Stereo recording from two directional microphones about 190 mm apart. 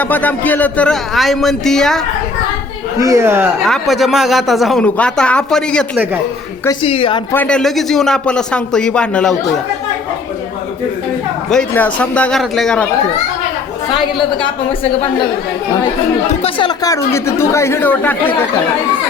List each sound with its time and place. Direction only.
0.0 s speech: 10° left (ahead or behind)
3.0 s speech: 15° right (ahead or behind)
3.6 s speech: centre (ahead or behind)
6.7 s a woman's voice: 30° left (ahead or behind)
7.3 s speech: 5° left (ahead or behind)
11.5 s speech: 10° left (ahead or behind)
16.4 s speech: 25° left (ahead or behind); by 18.4 s 10° left (ahead or behind)